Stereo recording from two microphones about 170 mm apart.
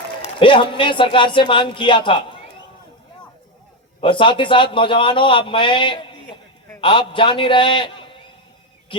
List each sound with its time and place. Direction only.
0.2 s a man's voice: 30° left (ahead or behind)
4.0 s a man's voice: 30° left (ahead or behind)
8.9 s a sound: 30° left (ahead or behind)